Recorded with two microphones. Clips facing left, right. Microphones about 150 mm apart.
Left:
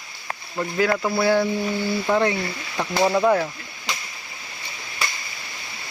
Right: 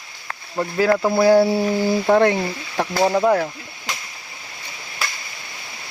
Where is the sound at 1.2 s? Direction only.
40° right (ahead or behind).